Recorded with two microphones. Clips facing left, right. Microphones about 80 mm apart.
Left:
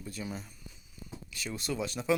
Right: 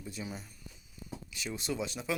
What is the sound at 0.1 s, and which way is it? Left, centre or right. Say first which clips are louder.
Speech: left 2 dB; centre.